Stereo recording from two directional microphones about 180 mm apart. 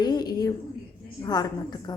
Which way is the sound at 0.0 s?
25° left (ahead or behind).